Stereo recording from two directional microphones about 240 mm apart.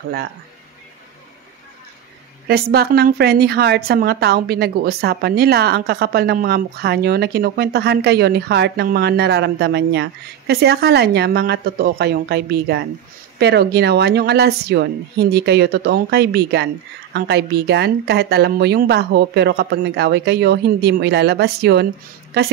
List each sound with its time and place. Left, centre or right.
2.4 s a woman's voice: right